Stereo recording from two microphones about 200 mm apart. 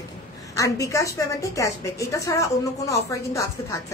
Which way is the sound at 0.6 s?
15° left (ahead or behind).